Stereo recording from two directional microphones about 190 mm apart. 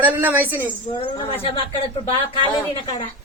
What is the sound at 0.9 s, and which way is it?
Speech, 25° left (ahead or behind).